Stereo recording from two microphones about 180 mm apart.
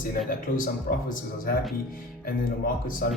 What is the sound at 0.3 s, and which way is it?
Speech, 50° left (ahead or behind).